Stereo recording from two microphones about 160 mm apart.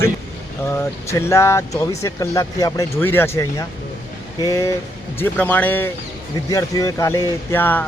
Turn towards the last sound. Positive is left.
turn(degrees=10)  # may be behind; listen again after turning